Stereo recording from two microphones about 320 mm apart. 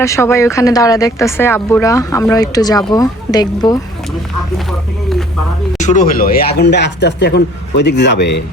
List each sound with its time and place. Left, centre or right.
0.0 s speech: centre
5.8 s a man's voice: left